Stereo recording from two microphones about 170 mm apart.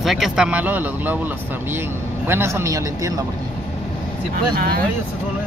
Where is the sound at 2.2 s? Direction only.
15° right (ahead or behind).